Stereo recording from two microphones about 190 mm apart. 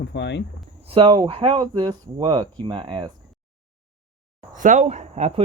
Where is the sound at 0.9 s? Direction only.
25° right (ahead or behind).